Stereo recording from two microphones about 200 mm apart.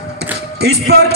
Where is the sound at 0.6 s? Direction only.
50° right (ahead or behind).